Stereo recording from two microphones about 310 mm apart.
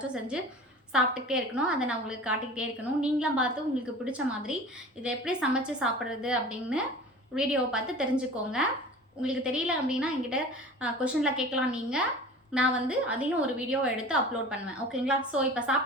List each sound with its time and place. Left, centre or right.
0.9 s a woman's voice: centre